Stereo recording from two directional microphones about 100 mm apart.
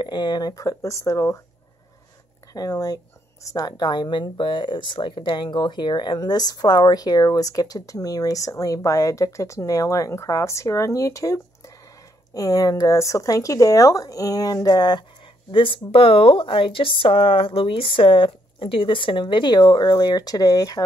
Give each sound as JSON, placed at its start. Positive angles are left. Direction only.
{"t": 0.0, "sound": "speech", "side_deg": 45}
{"t": 2.5, "sound": "speech", "side_deg": 35}
{"t": 15.5, "sound": "speech", "side_deg": 60}